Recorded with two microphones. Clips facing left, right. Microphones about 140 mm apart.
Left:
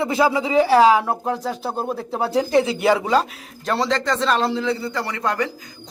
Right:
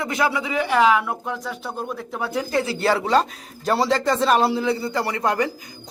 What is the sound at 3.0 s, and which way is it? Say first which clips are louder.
Speech: even; 5° left (ahead or behind).